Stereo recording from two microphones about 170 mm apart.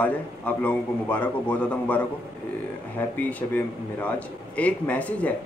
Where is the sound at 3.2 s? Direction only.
10° left (ahead or behind).